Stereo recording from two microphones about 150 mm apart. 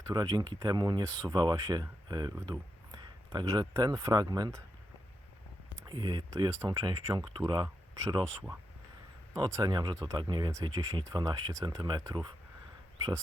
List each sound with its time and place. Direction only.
0.1 s speech: 30° right (ahead or behind)
5.8 s speech: 30° right (ahead or behind)